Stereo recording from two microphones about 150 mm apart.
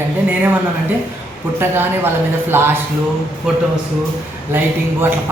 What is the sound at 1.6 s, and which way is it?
Speech, 15° right (ahead or behind).